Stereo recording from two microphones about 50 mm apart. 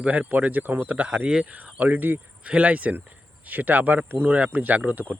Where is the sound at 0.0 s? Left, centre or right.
Right.